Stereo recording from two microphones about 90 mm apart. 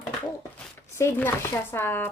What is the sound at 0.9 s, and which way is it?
Speech, 30° left (ahead or behind).